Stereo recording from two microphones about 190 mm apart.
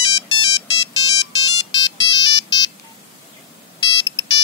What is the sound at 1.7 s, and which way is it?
Ringtone, 25° left (ahead or behind).